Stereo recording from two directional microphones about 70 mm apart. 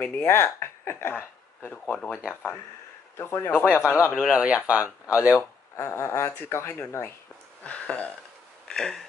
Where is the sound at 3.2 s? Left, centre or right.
Left.